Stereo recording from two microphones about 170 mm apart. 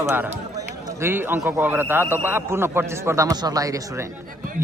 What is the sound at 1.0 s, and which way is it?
Speech, 10° right (ahead or behind).